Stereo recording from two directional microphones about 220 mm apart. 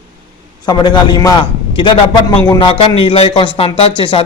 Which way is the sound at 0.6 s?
20° left (ahead or behind).